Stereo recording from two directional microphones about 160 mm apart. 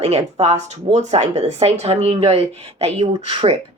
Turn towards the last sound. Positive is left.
turn(degrees=-30)  # may be behind; listen again after turning